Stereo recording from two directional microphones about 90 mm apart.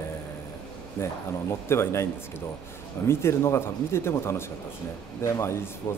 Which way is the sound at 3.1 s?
30° left (ahead or behind).